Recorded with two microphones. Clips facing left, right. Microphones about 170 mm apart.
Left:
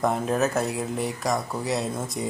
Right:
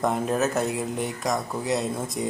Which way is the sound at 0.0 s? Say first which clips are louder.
Even; centre (ahead or behind).